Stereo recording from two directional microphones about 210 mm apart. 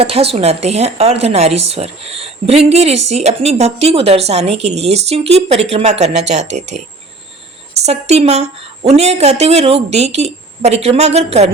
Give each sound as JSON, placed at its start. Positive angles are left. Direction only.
{"t": 0.0, "sound": "a woman's voice", "side_deg": -30}